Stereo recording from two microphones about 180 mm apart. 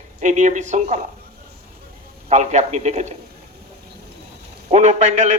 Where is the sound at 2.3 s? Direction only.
40° right (ahead or behind).